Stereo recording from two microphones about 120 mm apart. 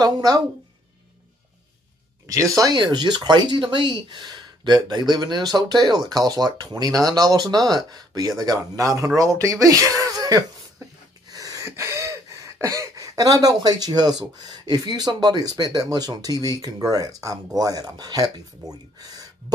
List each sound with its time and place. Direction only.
0.0 s speech: 30° right (ahead or behind)
2.2 s speech: 30° right (ahead or behind)
11.2 s gasp: 30° right (ahead or behind)
16.9 s speech: 30° right (ahead or behind)